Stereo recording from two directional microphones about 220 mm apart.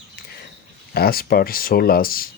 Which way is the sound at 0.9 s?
45° left (ahead or behind).